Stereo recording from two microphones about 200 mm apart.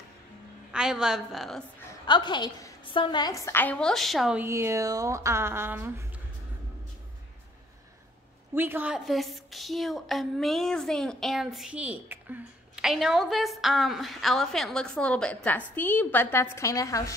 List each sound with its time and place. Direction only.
0.7 s a woman's voice: 5° right (ahead or behind)
2.0 s a woman's voice: 20° left (ahead or behind); by 6.0 s 10° right (ahead or behind)
8.5 s a woman's voice: 10° right (ahead or behind); by 17.1 s 15° left (ahead or behind)